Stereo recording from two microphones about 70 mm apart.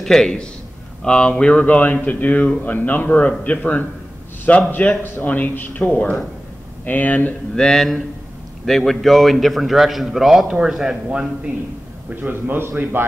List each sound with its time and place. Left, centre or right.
0.0 s a man's voice: centre; by 7.3 s left
7.5 s a man's voice: centre
12.1 s a man's voice: right